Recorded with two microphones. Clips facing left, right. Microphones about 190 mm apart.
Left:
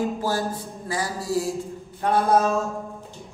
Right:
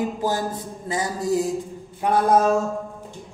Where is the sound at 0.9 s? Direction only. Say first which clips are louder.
Right 3 dB; 20° right (ahead or behind).